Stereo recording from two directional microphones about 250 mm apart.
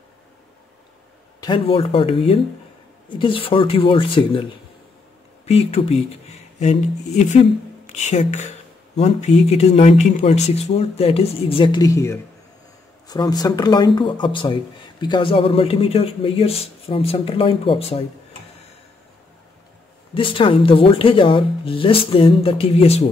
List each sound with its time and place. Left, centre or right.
1.4 s speech: centre
20.2 s speech: left